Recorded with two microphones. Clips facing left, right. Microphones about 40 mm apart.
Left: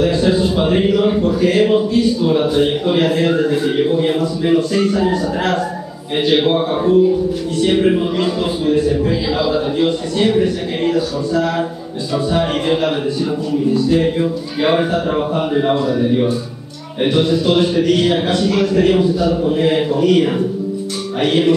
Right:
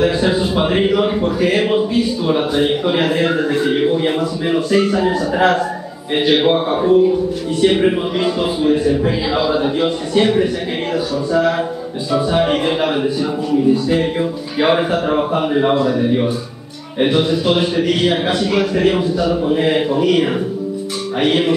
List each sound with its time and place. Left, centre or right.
0.0 s a man's voice: centre